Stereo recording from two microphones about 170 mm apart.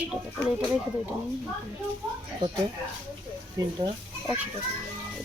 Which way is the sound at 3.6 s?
20° right (ahead or behind).